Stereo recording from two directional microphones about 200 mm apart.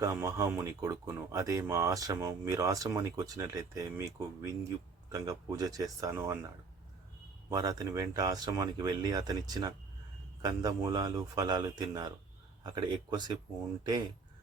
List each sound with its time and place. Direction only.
0.0 s speech: 15° right (ahead or behind)
7.5 s speech: 15° right (ahead or behind)